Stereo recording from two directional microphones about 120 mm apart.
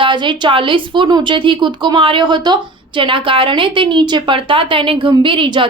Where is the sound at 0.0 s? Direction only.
40° right (ahead or behind).